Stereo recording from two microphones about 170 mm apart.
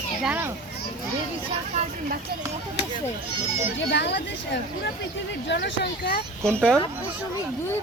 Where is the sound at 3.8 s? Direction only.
90° left; by 6.2 s 65° left (ahead or behind).